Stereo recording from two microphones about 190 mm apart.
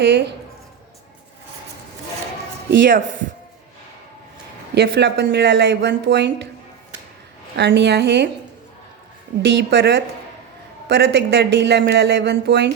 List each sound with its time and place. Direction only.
0.0 s speech: 60° right (ahead or behind)
2.6 s speech: 70° right (ahead or behind)
4.7 s speech: 65° right (ahead or behind)
7.5 s speech: 65° right (ahead or behind)
9.5 s speech: 60° right (ahead or behind)